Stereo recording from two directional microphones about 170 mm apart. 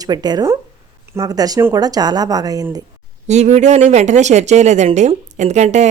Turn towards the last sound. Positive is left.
turn(degrees=-40)  # may be behind; listen again after turning